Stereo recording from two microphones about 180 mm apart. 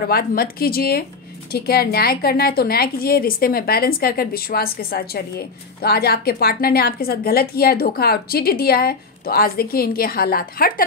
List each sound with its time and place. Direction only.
0.1 s a woman's voice: 55° left (ahead or behind)